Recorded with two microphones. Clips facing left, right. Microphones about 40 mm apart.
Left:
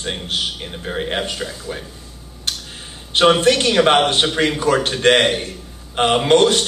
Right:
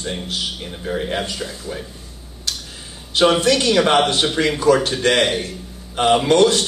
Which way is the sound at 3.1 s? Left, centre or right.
Left.